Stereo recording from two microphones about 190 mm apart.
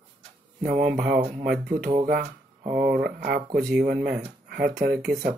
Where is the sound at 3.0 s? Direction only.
55° right (ahead or behind).